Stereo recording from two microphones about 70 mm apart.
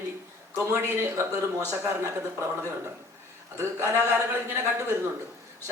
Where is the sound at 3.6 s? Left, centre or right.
Right.